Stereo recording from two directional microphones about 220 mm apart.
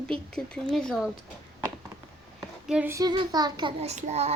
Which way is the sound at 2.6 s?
5° right (ahead or behind).